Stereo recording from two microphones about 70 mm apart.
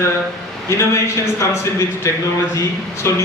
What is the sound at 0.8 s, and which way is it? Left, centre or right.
A man's voice, left.